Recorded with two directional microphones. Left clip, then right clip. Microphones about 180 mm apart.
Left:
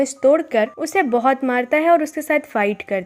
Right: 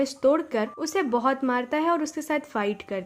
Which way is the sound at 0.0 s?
15° left (ahead or behind).